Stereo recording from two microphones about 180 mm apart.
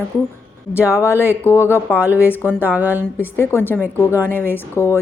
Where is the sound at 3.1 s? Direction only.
15° left (ahead or behind).